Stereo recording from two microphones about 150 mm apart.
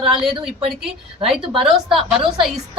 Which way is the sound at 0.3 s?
35° right (ahead or behind).